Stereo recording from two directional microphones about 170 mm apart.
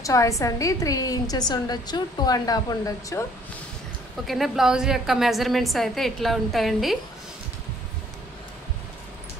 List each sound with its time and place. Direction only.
0.0 s a woman's voice: 20° left (ahead or behind)
4.3 s a woman's voice: centre (ahead or behind)